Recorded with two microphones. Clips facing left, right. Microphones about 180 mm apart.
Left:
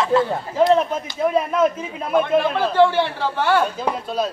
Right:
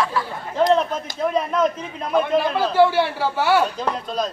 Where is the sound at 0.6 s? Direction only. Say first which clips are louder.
Left 1 dB; 5° left (ahead or behind).